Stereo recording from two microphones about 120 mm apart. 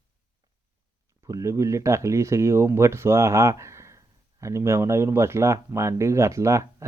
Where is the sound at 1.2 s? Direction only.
25° right (ahead or behind).